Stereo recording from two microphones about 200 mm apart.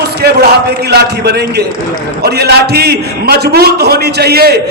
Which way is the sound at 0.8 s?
55° right (ahead or behind).